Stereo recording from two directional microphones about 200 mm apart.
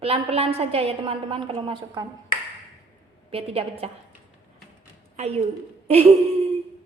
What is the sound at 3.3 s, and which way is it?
Speech, 30° right (ahead or behind).